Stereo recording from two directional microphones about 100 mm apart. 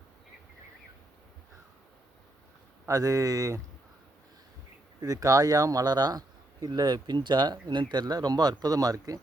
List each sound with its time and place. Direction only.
2.8 s a man's voice: 35° right (ahead or behind)
4.9 s a man's voice: 35° right (ahead or behind)